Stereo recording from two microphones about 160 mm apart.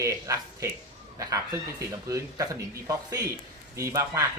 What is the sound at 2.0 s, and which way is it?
A man's voice, 20° right (ahead or behind).